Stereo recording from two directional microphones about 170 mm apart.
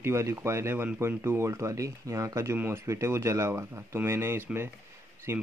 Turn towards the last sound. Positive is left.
turn(degrees=-15)  # may be behind; listen again after turning